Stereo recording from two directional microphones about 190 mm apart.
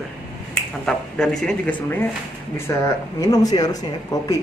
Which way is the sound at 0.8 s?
5° left (ahead or behind).